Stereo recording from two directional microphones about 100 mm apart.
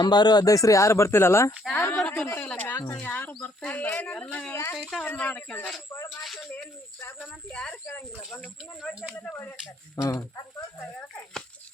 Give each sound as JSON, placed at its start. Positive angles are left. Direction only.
{"t": 0.0, "sound": "speech", "side_deg": 45}
{"t": 2.0, "sound": "speech", "side_deg": 15}
{"t": 2.7, "sound": "speech", "side_deg": 30}
{"t": 3.0, "sound": "speech", "side_deg": 15}
{"t": 6.2, "sound": "speech", "side_deg": 0}
{"t": 7.5, "sound": "speech", "side_deg": 10}
{"t": 9.9, "sound": "speech", "side_deg": 30}